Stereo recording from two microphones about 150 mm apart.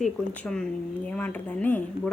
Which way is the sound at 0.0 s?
5° left (ahead or behind).